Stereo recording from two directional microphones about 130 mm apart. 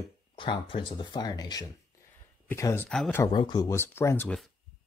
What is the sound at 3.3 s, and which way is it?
Speech, 35° left (ahead or behind).